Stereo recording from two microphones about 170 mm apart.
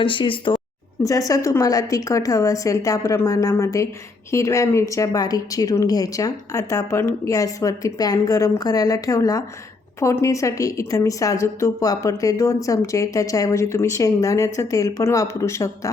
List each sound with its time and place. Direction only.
0.0 s a woman's voice: 30° left (ahead or behind)